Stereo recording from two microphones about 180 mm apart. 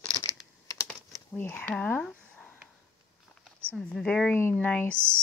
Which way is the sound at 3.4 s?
5° right (ahead or behind).